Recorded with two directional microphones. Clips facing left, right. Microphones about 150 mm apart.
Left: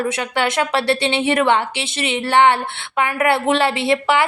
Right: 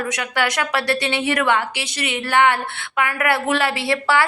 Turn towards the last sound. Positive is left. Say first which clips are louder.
# left 2 dB
turn(degrees=20)  # may be behind; listen again after turning